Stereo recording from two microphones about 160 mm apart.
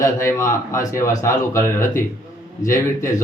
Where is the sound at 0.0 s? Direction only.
15° left (ahead or behind).